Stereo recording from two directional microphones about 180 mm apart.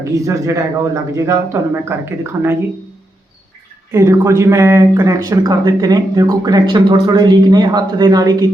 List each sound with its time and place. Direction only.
0.0 s speech: 15° right (ahead or behind)
3.9 s speech: 15° right (ahead or behind)